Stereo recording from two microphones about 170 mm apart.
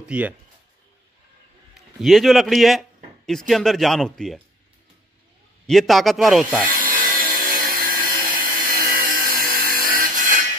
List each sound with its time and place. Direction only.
0.0 s speech: 5° right (ahead or behind)
2.0 s speech: centre (ahead or behind)
5.7 s speech: centre (ahead or behind)
6.7 s a sound: 55° right (ahead or behind)